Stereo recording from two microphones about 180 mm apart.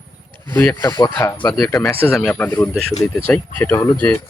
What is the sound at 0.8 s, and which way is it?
Speech, 25° left (ahead or behind).